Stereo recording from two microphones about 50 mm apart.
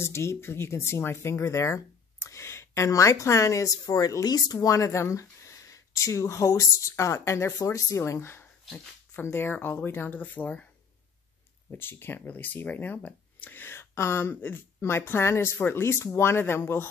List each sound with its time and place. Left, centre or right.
0.0 s speech: left
5.7 s speech: left
9.4 s speech: left
11.7 s speech: left
13.7 s speech: left
14.3 s speech: left
14.8 s speech: left